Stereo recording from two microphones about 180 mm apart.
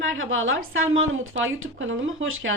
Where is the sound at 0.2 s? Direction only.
90° right.